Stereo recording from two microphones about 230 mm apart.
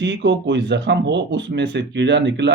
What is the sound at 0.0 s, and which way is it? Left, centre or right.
Speech, right.